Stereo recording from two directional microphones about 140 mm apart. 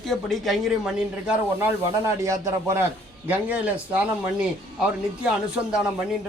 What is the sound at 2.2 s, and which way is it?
Speech, 20° right (ahead or behind).